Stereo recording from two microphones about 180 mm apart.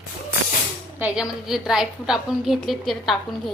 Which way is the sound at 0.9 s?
5° right (ahead or behind).